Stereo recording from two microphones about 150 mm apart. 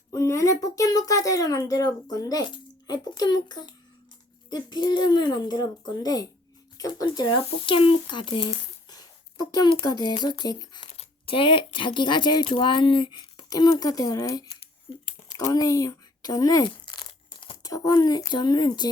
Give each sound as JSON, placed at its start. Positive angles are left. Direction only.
{"t": 0.1, "sound": "speech", "side_deg": 20}
{"t": 8.9, "sound": "a sound", "side_deg": 25}
{"t": 9.8, "sound": "speech", "side_deg": 30}
{"t": 15.4, "sound": "speech", "side_deg": 25}